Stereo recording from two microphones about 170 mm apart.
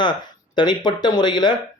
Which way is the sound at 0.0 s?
25° left (ahead or behind).